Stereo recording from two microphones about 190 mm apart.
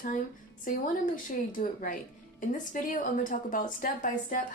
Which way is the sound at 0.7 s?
45° left (ahead or behind).